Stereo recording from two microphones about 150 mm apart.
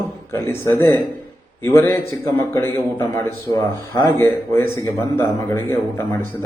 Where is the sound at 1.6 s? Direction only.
15° left (ahead or behind).